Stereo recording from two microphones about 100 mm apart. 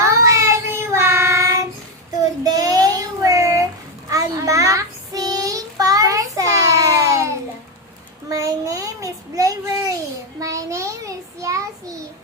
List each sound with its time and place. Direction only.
0.0 s child singing: 30° right (ahead or behind)